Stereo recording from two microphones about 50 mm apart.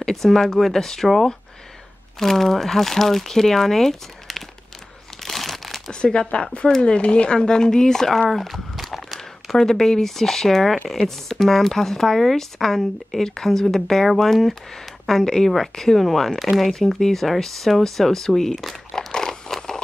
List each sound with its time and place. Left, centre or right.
0.0 s speech: centre
2.1 s speech: centre
5.2 s crumpling: centre
5.9 s speech: centre